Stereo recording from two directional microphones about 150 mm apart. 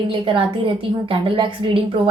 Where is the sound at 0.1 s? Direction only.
35° right (ahead or behind).